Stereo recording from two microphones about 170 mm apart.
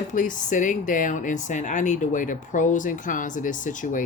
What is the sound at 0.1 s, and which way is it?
Speech, 50° left (ahead or behind).